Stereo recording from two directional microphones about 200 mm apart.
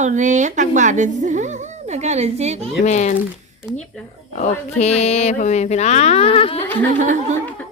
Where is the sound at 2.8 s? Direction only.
35° left (ahead or behind).